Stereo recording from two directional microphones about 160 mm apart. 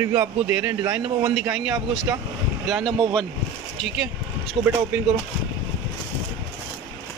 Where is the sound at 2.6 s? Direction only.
Centre (ahead or behind).